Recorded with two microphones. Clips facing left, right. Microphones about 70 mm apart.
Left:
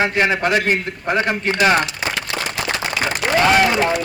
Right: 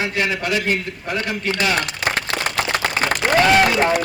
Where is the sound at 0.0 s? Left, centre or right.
Left.